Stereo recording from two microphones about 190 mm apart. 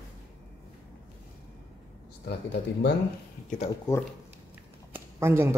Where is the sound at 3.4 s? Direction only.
35° left (ahead or behind).